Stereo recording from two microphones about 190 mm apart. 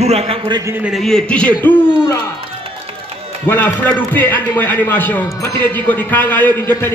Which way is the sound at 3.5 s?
10° left (ahead or behind).